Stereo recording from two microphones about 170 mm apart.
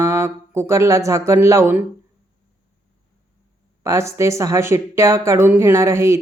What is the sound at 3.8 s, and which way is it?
A woman's voice, 15° right (ahead or behind).